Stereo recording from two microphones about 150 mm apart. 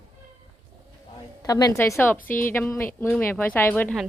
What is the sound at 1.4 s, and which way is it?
Speech, 25° left (ahead or behind).